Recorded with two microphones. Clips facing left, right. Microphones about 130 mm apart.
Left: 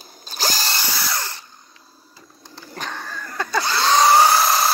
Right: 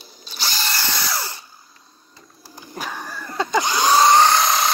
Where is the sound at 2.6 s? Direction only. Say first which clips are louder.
Right 1 dB; 10° right (ahead or behind).